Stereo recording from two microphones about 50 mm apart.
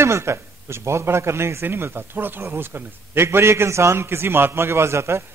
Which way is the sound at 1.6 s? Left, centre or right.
Right.